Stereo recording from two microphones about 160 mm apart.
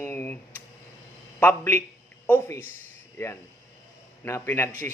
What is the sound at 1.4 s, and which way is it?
A man's voice, 10° left (ahead or behind).